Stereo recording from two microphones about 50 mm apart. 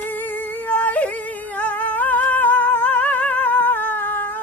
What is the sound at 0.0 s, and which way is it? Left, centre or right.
Music, left.